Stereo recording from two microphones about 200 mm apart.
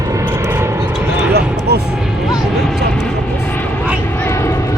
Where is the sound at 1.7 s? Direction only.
55° right (ahead or behind).